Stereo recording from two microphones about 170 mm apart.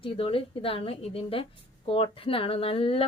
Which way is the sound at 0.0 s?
30° left (ahead or behind).